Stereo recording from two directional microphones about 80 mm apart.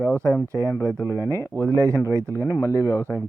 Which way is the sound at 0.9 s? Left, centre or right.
Left.